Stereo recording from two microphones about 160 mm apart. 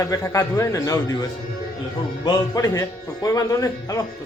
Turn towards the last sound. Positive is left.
turn(degrees=20)  # may be behind; listen again after turning